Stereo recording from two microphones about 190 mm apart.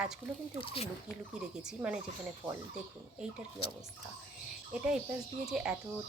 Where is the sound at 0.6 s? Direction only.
30° left (ahead or behind).